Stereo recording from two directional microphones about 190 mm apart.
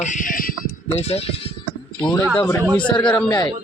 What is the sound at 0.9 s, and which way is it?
Speech, 35° left (ahead or behind).